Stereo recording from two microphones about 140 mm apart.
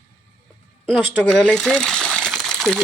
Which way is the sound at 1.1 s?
5° left (ahead or behind).